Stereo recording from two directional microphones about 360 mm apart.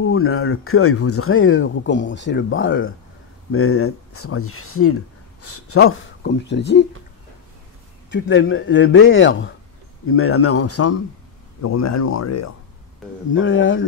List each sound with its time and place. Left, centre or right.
0.0 s speech: left
8.1 s speech: left
13.3 s speech: left